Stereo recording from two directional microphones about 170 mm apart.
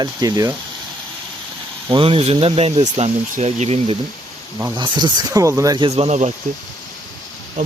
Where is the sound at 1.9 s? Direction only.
30° right (ahead or behind).